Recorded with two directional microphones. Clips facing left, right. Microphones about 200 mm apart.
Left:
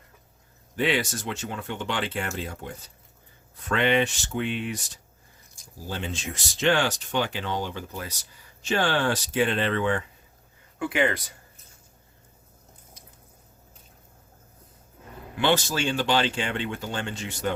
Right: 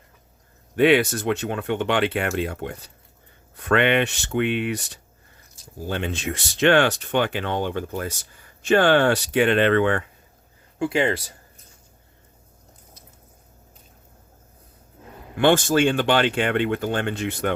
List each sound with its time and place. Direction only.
0.8 s speech: 60° right (ahead or behind)
10.8 s speech: 30° right (ahead or behind)
15.4 s speech: 50° right (ahead or behind)